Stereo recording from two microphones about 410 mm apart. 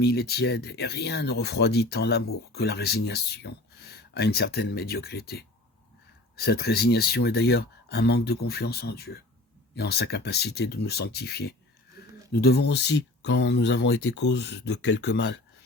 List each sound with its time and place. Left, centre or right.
0.0 s speech: left